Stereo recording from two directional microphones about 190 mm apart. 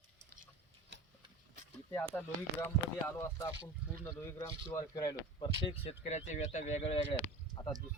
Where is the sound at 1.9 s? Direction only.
10° left (ahead or behind); by 7.1 s 35° left (ahead or behind).